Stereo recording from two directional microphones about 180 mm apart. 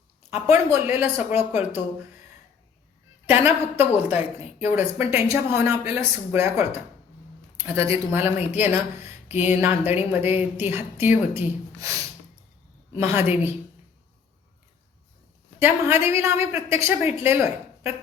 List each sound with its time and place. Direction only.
0.3 s speech: 15° right (ahead or behind)
1.4 s speech: 35° left (ahead or behind)
3.2 s speech: 10° right (ahead or behind)
13.0 s speech: 15° right (ahead or behind)
15.6 s speech: 15° right (ahead or behind)